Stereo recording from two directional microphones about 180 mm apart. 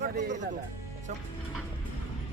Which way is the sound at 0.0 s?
45° right (ahead or behind).